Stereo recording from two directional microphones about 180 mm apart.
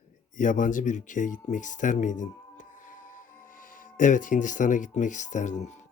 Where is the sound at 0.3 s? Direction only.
45° left (ahead or behind).